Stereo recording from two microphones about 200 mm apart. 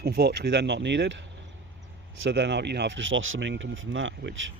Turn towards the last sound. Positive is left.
turn(degrees=-65)  # may be behind; listen again after turning